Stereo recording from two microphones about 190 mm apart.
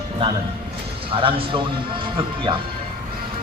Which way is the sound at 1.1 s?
30° right (ahead or behind).